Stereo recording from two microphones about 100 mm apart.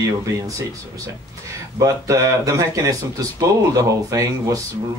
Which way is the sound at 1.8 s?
35° right (ahead or behind).